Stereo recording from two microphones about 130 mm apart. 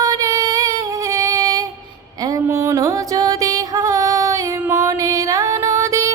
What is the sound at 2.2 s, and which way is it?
Music, 25° right (ahead or behind).